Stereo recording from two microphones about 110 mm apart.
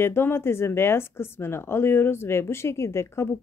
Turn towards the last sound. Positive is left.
turn(degrees=25)  # may be behind; listen again after turning